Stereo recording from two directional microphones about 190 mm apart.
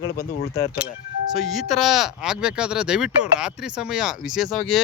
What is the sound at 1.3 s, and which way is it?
Speech, centre (ahead or behind).